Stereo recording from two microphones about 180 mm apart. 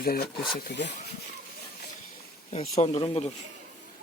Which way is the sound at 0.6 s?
65° left (ahead or behind).